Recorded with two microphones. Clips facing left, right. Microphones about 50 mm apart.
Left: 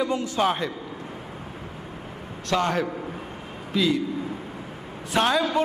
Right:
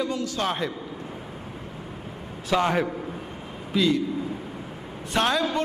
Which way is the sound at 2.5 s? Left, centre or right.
Centre.